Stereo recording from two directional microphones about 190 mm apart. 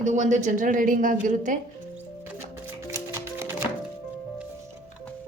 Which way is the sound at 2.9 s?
15° right (ahead or behind).